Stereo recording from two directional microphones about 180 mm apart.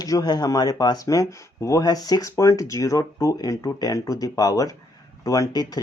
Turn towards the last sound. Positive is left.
turn(degrees=20)  # may be behind; listen again after turning